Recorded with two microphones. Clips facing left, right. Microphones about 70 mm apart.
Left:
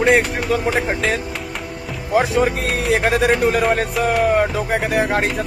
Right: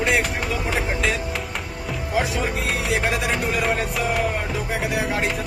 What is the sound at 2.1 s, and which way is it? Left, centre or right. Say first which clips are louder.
Speech: left 7 dB; left.